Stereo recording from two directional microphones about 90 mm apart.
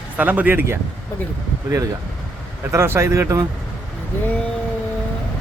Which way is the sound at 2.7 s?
30° right (ahead or behind).